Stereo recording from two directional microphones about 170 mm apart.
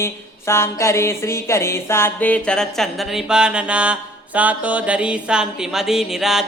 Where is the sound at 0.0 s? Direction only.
15° left (ahead or behind).